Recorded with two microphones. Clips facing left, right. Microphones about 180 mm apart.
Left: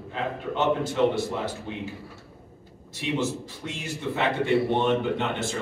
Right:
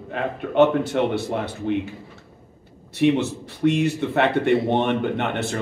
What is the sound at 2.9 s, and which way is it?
A man's voice, 60° right (ahead or behind).